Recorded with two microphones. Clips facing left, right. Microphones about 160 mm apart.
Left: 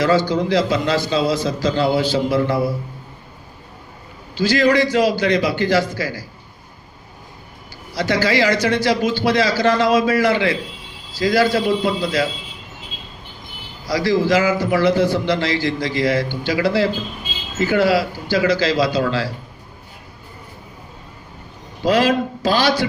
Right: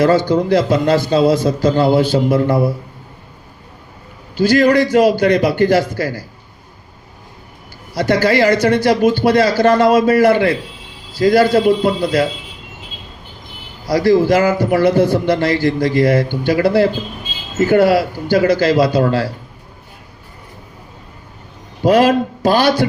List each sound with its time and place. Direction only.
0.0 s a man's voice: 55° right (ahead or behind)
4.4 s a man's voice: 55° right (ahead or behind)
7.9 s a man's voice: 55° right (ahead or behind)
13.8 s a man's voice: 55° right (ahead or behind)
21.8 s a man's voice: 55° right (ahead or behind)